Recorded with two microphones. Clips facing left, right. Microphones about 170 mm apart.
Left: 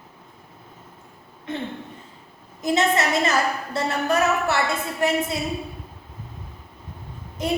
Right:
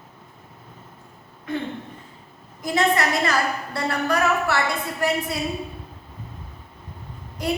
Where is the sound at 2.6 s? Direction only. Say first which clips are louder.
Even; 20° left (ahead or behind).